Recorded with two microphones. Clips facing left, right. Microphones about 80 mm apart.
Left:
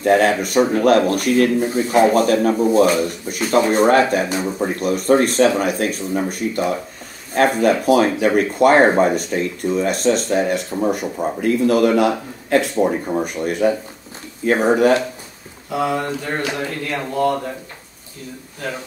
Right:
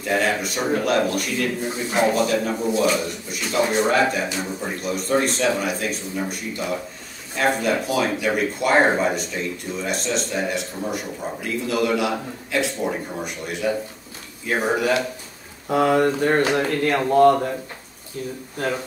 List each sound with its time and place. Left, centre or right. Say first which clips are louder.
0.0 s speech: left 7 dB; left
15.7 s speech: right 3 dB; right